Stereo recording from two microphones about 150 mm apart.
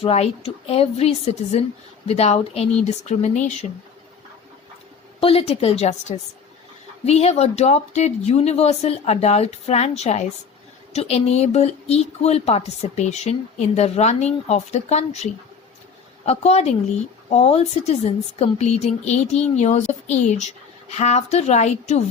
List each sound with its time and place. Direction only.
0.0 s speech: 45° left (ahead or behind)
5.2 s speech: 40° left (ahead or behind)